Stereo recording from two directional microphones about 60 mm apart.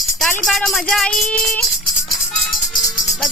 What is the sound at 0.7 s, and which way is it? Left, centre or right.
Speech, centre.